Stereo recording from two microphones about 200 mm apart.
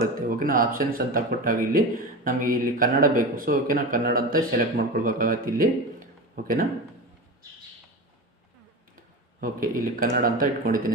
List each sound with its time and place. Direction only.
0.3 s speech: 45° right (ahead or behind)
9.4 s speech: 45° right (ahead or behind)